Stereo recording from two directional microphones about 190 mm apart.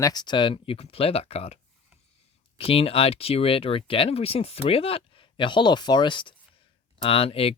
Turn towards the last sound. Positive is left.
turn(degrees=30)  # may be behind; listen again after turning